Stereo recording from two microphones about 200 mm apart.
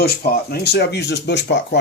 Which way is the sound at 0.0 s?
50° left (ahead or behind).